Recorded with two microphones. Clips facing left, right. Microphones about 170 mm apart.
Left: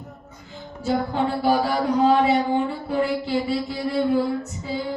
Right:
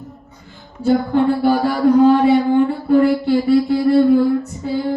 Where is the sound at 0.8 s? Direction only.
55° right (ahead or behind).